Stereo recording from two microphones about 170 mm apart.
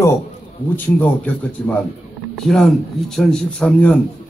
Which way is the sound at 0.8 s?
10° left (ahead or behind).